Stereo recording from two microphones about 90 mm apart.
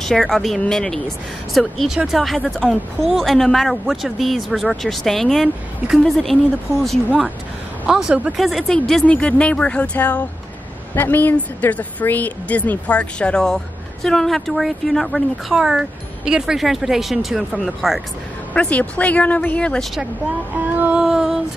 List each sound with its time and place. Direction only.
0.0 s speech: 5° left (ahead or behind)
7.8 s a woman's voice: 10° right (ahead or behind)
18.5 s a woman's voice: 15° left (ahead or behind)
20.5 s music: 20° right (ahead or behind)
21.0 s speech: 5° right (ahead or behind)